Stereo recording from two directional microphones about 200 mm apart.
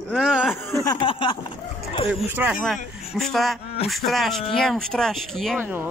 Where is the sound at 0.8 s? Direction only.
25° left (ahead or behind).